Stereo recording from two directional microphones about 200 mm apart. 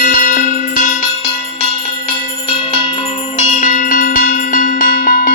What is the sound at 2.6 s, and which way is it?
Music, 30° left (ahead or behind).